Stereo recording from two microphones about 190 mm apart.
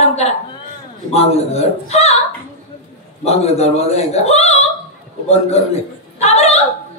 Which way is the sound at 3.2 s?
35° left (ahead or behind).